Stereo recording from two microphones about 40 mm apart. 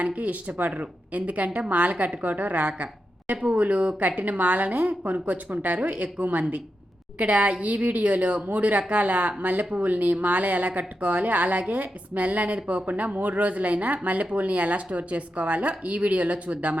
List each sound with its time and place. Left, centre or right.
0.0 s a woman's voice: right